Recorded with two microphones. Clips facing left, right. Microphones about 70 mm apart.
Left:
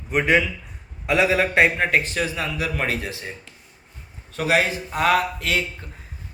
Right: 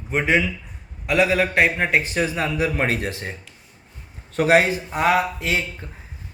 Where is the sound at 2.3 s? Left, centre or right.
Right.